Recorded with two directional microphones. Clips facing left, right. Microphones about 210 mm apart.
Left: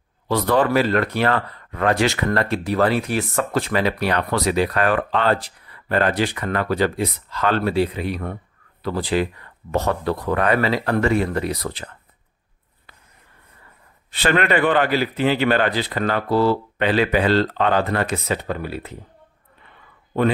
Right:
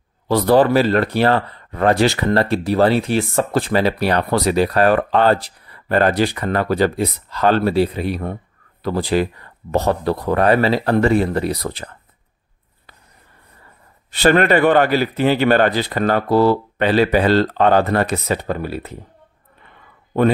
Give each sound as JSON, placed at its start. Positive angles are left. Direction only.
{"t": 0.3, "sound": "speech", "side_deg": -35}
{"t": 14.1, "sound": "speech", "side_deg": -40}